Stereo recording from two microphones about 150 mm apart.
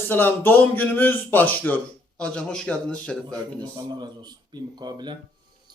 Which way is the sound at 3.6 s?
30° right (ahead or behind).